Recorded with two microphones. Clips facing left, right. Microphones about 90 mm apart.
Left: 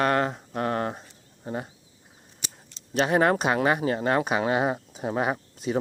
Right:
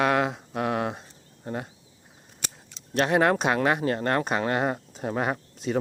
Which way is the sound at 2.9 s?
Centre (ahead or behind).